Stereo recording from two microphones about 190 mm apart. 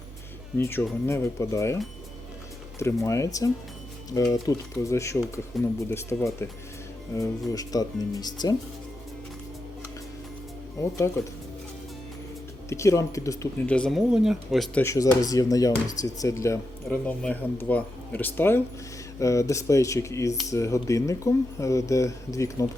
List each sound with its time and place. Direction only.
0.6 s speech: 10° left (ahead or behind)
5.5 s speech: centre (ahead or behind)
5.9 s speech: 15° left (ahead or behind)
7.5 s speech: 20° left (ahead or behind)
10.8 s speech: 15° left (ahead or behind)
12.6 s speech: 15° left (ahead or behind)
13.7 s speech: centre (ahead or behind)
14.8 s speech: 15° left (ahead or behind)